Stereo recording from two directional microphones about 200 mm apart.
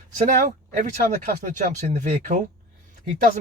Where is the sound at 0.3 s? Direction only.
40° right (ahead or behind).